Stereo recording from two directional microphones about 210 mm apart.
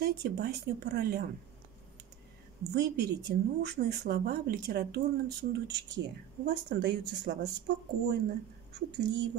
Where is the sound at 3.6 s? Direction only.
50° right (ahead or behind).